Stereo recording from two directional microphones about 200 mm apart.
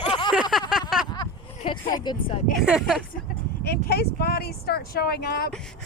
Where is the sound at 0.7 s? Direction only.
5° right (ahead or behind).